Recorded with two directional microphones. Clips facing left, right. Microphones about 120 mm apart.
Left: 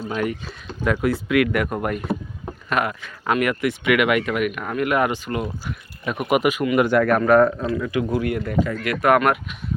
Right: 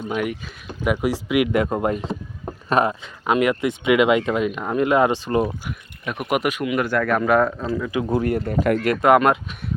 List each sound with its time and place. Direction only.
0.1 s speech: 10° right (ahead or behind); by 5.5 s 30° right (ahead or behind)
6.1 s speech: centre (ahead or behind)
6.7 s speech: 15° left (ahead or behind)
7.2 s speech: centre (ahead or behind)
7.9 s speech: 20° right (ahead or behind)
8.2 s speech: 35° right (ahead or behind)
9.0 s speech: 20° right (ahead or behind)